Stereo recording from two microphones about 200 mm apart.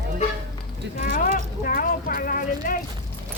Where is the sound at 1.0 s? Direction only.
45° left (ahead or behind).